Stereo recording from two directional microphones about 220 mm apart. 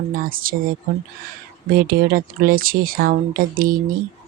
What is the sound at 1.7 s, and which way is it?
Speech, 40° right (ahead or behind).